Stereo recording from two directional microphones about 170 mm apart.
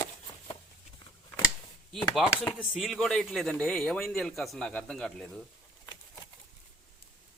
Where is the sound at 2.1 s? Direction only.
Centre (ahead or behind).